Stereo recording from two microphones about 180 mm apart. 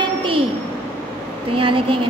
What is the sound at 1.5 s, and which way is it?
Speech, 30° right (ahead or behind).